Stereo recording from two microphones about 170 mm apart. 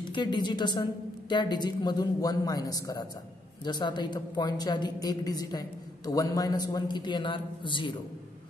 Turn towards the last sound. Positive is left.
turn(degrees=30)  # may be behind; listen again after turning